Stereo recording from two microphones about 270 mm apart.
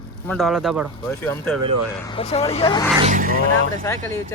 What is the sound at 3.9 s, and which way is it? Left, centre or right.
Speech, centre.